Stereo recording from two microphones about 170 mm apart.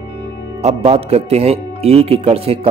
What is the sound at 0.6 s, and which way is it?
Speech, 35° right (ahead or behind).